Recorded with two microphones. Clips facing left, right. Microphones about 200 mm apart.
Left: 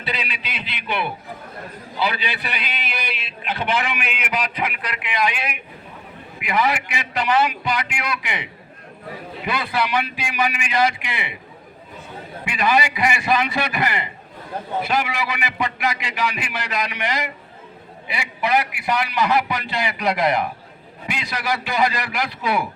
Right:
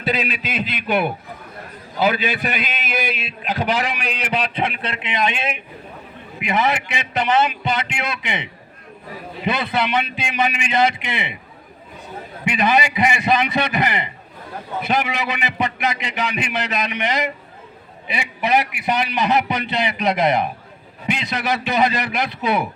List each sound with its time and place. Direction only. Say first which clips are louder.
0.0 s a man's voice: right 7 dB; 45° right (ahead or behind); by 8.4 s 25° right (ahead or behind)
9.5 s a man's voice: right 2 dB; 20° right (ahead or behind)
12.5 s a man's voice: right 2 dB; 20° right (ahead or behind)